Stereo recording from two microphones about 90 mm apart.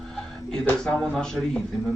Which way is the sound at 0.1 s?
5° left (ahead or behind).